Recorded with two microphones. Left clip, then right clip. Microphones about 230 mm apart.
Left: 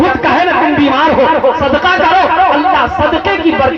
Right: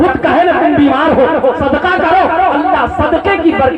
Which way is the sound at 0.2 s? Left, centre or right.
Right.